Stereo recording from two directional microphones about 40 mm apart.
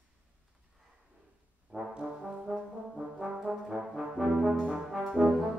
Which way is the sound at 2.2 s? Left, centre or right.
Centre.